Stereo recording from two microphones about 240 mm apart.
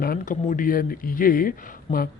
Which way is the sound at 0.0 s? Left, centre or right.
Left.